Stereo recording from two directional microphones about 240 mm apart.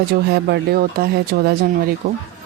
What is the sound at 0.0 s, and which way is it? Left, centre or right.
Speech, right.